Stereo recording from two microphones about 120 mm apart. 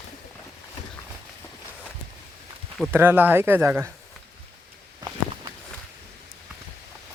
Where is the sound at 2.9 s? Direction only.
20° right (ahead or behind).